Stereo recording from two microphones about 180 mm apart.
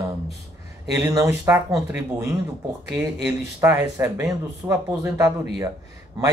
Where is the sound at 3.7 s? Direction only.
20° right (ahead or behind).